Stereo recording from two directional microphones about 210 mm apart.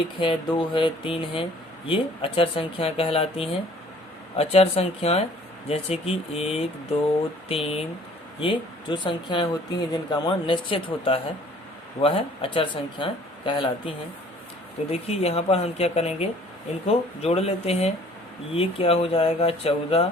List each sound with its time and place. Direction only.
0.2 s speech: 25° left (ahead or behind)
15.0 s speech: 30° left (ahead or behind)